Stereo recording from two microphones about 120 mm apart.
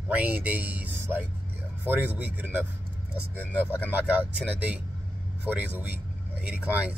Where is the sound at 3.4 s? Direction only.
15° left (ahead or behind).